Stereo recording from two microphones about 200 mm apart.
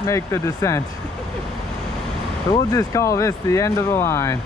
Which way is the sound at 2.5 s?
15° left (ahead or behind).